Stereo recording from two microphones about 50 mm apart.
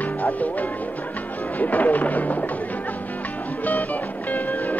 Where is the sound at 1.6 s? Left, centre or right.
Left.